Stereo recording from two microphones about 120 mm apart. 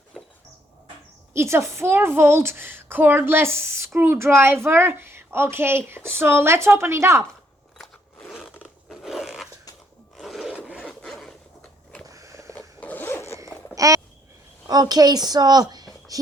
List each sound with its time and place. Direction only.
1.3 s a woman's voice: 20° right (ahead or behind)
7.8 s biting: centre (ahead or behind)
10.2 s a sound: centre (ahead or behind)
11.0 s dog: 5° left (ahead or behind)
12.0 s biting: 25° right (ahead or behind)
12.5 s zipper: 15° left (ahead or behind)
13.7 s a sound: 30° right (ahead or behind)
14.7 s a woman's voice: 35° right (ahead or behind)